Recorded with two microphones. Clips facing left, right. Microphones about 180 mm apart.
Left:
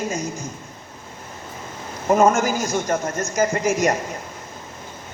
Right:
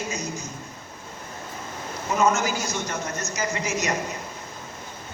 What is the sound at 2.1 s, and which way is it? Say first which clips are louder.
A man's voice: left 6 dB; 50° left (ahead or behind).